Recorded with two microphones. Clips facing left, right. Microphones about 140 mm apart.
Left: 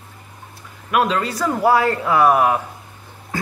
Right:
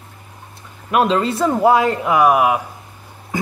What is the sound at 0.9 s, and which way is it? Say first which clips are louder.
Speech: right 3 dB; 25° right (ahead or behind).